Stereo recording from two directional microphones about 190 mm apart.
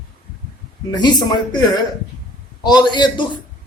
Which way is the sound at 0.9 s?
20° left (ahead or behind).